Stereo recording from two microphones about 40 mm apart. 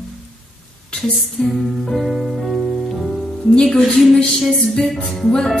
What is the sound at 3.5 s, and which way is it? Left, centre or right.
Music, left.